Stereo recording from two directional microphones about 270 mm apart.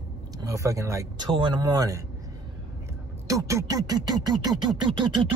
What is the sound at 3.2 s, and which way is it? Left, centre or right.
A man's voice, centre.